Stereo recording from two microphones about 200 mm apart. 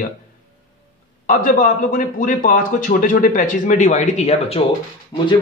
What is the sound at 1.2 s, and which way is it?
Speech, 45° left (ahead or behind).